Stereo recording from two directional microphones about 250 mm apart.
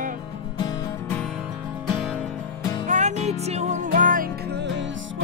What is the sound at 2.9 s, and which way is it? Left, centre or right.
Music, right.